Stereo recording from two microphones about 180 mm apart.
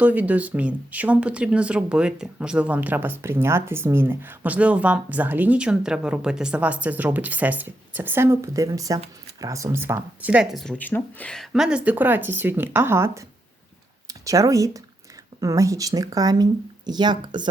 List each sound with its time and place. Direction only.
0.0 s speech: 10° right (ahead or behind); by 17.5 s 25° right (ahead or behind)